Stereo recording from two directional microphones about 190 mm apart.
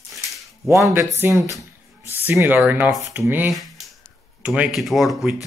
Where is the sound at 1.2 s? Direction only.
10° right (ahead or behind).